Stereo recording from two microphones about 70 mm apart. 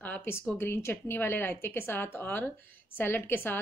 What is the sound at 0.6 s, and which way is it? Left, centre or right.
A woman's voice, left.